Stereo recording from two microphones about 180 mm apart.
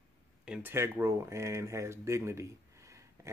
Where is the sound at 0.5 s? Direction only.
10° right (ahead or behind).